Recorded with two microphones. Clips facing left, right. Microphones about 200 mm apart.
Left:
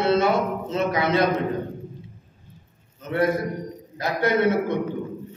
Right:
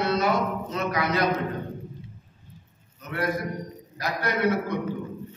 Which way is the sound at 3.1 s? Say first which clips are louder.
Left 6 dB; 25° left (ahead or behind).